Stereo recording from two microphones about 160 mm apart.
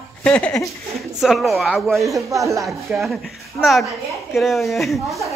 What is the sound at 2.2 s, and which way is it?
Speech, 20° right (ahead or behind).